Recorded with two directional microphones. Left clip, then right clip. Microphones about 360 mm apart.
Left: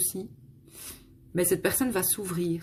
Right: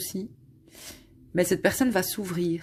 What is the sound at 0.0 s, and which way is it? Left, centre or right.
Speech, centre.